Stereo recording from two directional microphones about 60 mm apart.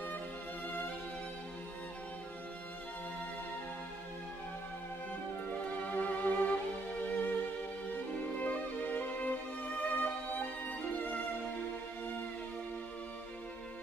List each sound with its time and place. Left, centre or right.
5.6 s music: left